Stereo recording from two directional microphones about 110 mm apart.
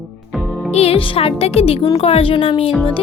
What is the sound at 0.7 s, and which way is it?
Speech, 70° left (ahead or behind).